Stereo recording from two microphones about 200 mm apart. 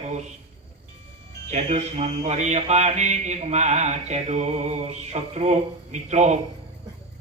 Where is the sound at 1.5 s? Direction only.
35° right (ahead or behind).